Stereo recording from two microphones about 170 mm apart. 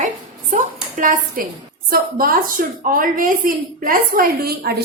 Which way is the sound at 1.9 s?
60° right (ahead or behind).